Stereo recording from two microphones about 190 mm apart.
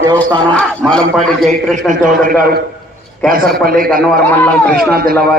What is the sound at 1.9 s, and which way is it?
Speech, 45° right (ahead or behind).